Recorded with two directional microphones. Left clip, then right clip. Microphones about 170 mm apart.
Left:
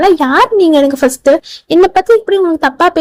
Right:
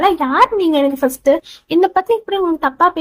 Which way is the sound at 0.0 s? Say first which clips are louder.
Left 4 dB; 35° left (ahead or behind).